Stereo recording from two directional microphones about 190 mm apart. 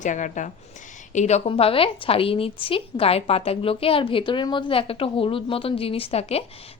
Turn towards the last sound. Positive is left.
turn(degrees=35)  # may be behind; listen again after turning